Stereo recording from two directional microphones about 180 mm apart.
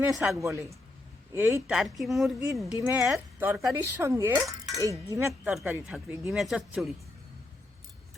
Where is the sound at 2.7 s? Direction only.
15° right (ahead or behind).